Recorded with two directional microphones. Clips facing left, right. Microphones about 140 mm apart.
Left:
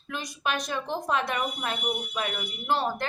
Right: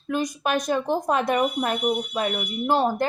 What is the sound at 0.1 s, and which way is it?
Speech, 45° right (ahead or behind).